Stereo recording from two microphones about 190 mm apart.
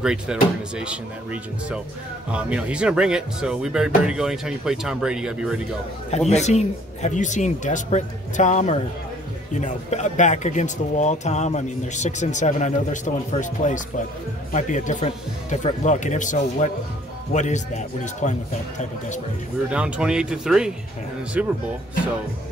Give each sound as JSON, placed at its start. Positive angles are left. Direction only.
{"t": 0.0, "sound": "speech", "side_deg": -5}
{"t": 6.0, "sound": "speech", "side_deg": 35}
{"t": 19.7, "sound": "speech", "side_deg": -5}